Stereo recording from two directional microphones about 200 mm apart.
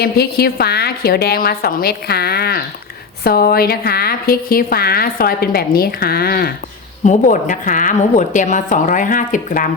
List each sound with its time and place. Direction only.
0.0 s a woman's voice: 50° left (ahead or behind)
7.0 s a woman's voice: 35° left (ahead or behind)